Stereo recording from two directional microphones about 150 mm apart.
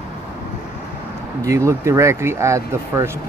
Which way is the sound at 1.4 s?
20° right (ahead or behind).